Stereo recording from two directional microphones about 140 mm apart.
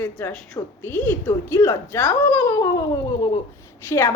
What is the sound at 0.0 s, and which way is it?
A woman's voice, 15° left (ahead or behind).